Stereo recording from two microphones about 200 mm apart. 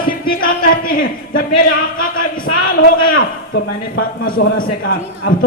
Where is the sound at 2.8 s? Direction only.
75° left (ahead or behind).